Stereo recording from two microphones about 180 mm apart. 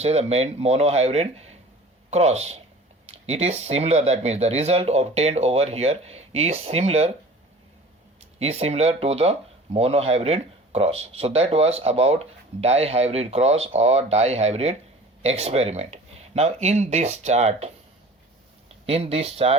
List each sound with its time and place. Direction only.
0.0 s speech: 35° right (ahead or behind)
8.4 s speech: 35° right (ahead or behind)
18.9 s speech: 35° right (ahead or behind)